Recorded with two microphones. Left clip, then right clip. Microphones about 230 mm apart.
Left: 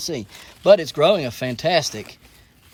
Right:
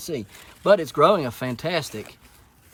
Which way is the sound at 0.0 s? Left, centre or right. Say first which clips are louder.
Left 3 dB; centre.